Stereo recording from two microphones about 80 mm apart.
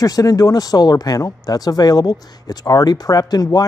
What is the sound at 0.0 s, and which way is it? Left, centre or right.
Speech, left.